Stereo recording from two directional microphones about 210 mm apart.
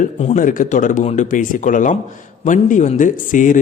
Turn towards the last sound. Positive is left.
turn(degrees=40)  # may be behind; listen again after turning